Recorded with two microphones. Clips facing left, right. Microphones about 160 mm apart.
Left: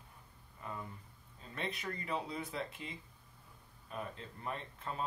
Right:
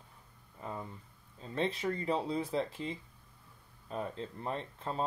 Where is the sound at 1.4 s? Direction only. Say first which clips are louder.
Right 8 dB; 30° right (ahead or behind).